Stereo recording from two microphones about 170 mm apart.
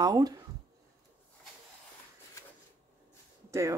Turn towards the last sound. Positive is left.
turn(degrees=-15)  # may be behind; listen again after turning